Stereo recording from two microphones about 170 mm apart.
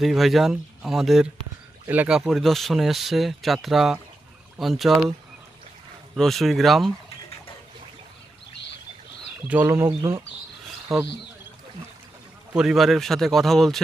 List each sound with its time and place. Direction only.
0.0 s speech: centre (ahead or behind)
6.1 s speech: centre (ahead or behind)
9.5 s speech: 10° right (ahead or behind)
10.9 s speech: centre (ahead or behind)
12.5 s speech: centre (ahead or behind)